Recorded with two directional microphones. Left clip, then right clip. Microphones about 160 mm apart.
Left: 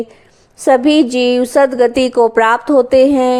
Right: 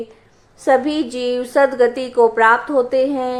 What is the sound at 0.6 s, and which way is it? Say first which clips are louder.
Speech: left 6 dB; 45° left (ahead or behind).